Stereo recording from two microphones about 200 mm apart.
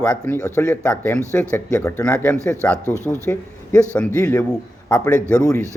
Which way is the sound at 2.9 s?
15° right (ahead or behind).